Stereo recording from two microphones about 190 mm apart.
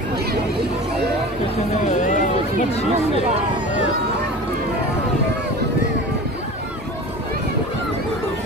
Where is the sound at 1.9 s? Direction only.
40° left (ahead or behind).